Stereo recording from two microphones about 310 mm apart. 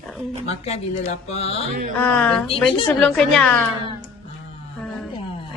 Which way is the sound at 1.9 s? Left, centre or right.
Centre.